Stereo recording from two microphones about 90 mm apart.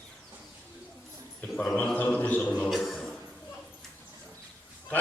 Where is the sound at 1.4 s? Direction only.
15° left (ahead or behind).